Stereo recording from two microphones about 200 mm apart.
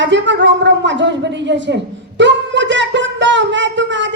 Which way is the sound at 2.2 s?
65° right (ahead or behind).